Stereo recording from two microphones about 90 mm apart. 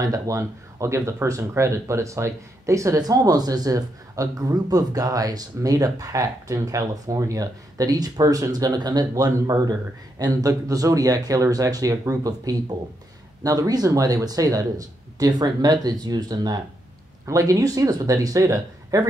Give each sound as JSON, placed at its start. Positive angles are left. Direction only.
{"t": 0.0, "sound": "speech", "side_deg": -40}